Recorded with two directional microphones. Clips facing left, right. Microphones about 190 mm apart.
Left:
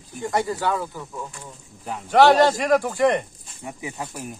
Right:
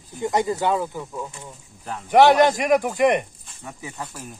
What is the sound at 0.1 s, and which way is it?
Speech, 20° right (ahead or behind).